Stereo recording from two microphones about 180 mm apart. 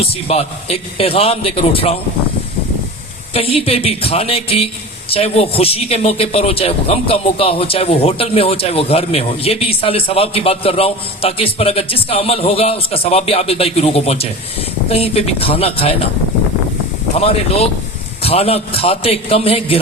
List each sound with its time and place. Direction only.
0.0 s speech: 35° left (ahead or behind)
3.3 s speech: 30° left (ahead or behind)
17.2 s speech: 35° left (ahead or behind)